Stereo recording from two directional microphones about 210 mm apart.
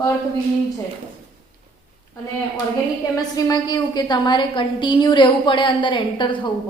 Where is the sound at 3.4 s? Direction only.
20° left (ahead or behind).